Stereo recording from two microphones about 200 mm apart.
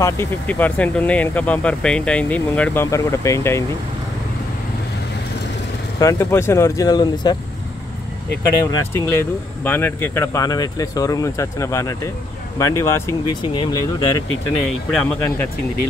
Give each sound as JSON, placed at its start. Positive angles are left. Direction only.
{"t": 0.0, "sound": "speech", "side_deg": 10}
{"t": 5.9, "sound": "speech", "side_deg": 15}
{"t": 8.7, "sound": "speech", "side_deg": 15}
{"t": 15.2, "sound": "speech", "side_deg": 10}